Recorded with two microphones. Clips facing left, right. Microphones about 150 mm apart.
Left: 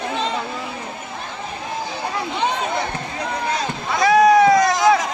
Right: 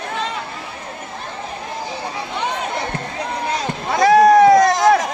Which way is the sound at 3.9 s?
40° right (ahead or behind).